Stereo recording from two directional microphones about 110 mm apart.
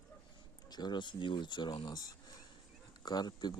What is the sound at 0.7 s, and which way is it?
Speech, 40° left (ahead or behind).